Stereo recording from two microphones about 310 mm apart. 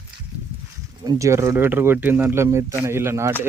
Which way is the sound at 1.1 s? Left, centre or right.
Centre.